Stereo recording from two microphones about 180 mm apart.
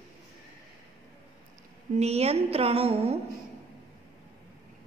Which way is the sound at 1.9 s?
35° right (ahead or behind).